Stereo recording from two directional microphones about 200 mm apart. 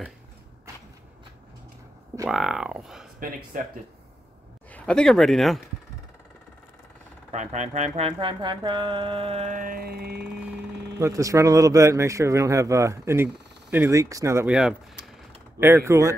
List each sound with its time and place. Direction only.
2.2 s speech: 5° right (ahead or behind)
3.2 s speech: 45° right (ahead or behind)
4.6 s speech: 5° left (ahead or behind)
7.3 s a sound: 35° right (ahead or behind); by 10.3 s 50° right (ahead or behind)
11.0 s a man's voice: 15° right (ahead or behind)